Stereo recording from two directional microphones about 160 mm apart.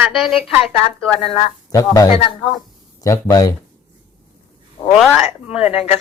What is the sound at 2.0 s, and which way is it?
Speech, 35° left (ahead or behind).